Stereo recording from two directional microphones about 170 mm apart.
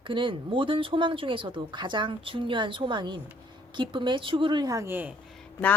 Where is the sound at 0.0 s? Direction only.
30° right (ahead or behind); by 5.1 s 10° right (ahead or behind).